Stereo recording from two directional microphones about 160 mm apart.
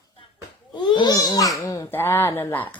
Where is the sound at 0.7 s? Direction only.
25° left (ahead or behind).